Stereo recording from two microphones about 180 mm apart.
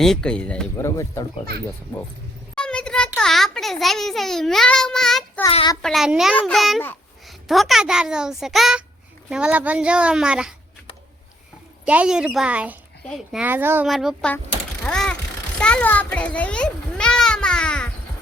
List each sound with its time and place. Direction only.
0.0 s a child's voice: 5° left (ahead or behind)
0.9 s speech: 15° left (ahead or behind)
2.6 s a sound: 5° left (ahead or behind)
5.5 s a child's voice: 30° left (ahead or behind)
5.8 s a child's voice: centre (ahead or behind)
11.9 s a child's voice: 5° right (ahead or behind)
14.8 s vehicle: 5° left (ahead or behind)
15.5 s children playing: 5° left (ahead or behind)